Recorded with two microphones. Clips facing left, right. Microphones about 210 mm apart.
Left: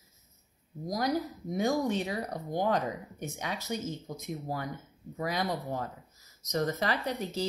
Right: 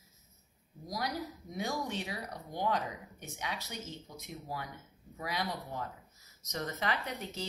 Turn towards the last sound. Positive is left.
turn(degrees=35)  # may be behind; listen again after turning